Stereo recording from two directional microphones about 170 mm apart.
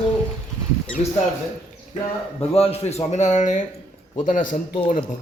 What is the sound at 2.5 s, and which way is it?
A man's voice, 35° left (ahead or behind).